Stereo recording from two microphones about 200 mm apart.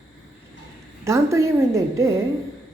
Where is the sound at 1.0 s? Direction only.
15° right (ahead or behind).